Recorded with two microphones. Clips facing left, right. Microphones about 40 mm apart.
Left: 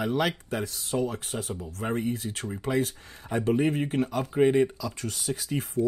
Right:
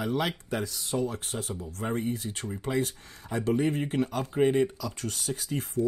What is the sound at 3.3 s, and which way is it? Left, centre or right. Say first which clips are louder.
Speech: left 3 dB; left.